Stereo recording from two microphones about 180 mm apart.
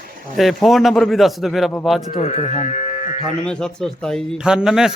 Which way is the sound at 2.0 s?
40° left (ahead or behind).